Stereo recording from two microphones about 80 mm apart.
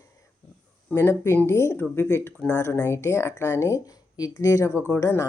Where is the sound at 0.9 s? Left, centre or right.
Left.